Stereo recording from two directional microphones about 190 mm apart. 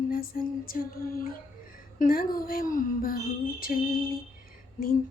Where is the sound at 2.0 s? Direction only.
50° left (ahead or behind).